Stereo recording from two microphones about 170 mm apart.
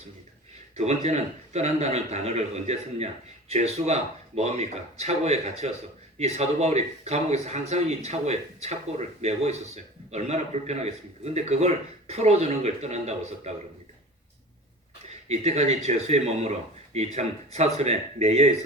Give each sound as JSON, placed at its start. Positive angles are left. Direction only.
{"t": 0.8, "sound": "a man's voice", "side_deg": -40}
{"t": 15.3, "sound": "a man's voice", "side_deg": -40}